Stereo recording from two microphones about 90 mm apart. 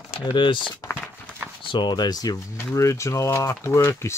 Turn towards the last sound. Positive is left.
turn(degrees=30)  # may be behind; listen again after turning